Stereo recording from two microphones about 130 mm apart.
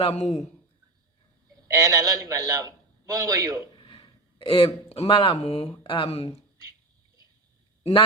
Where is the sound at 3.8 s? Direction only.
40° left (ahead or behind).